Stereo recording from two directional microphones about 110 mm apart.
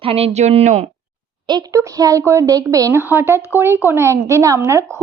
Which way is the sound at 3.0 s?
20° right (ahead or behind).